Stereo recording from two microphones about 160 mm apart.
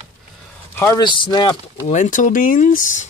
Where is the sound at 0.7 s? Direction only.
15° left (ahead or behind).